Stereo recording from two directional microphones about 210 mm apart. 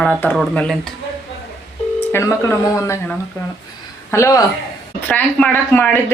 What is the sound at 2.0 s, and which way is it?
Speech, 10° left (ahead or behind).